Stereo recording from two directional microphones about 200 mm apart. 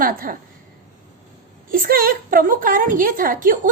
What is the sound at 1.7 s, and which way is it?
A woman's voice, 45° right (ahead or behind).